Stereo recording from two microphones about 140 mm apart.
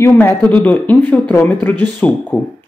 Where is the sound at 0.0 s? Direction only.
15° left (ahead or behind).